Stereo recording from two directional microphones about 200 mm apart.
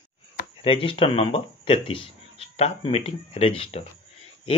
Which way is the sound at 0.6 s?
25° left (ahead or behind).